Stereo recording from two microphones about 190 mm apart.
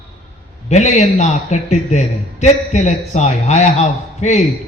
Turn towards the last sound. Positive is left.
turn(degrees=35)  # may be behind; listen again after turning